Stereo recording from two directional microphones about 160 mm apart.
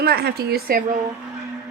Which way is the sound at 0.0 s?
85° right.